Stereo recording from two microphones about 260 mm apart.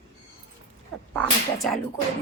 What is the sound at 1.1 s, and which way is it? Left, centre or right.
Speech, centre.